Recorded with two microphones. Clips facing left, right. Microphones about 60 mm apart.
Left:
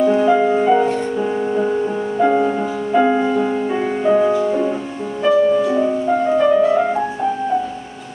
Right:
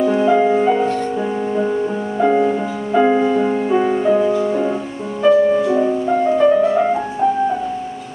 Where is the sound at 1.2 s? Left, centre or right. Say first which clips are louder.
Left 1 dB; centre.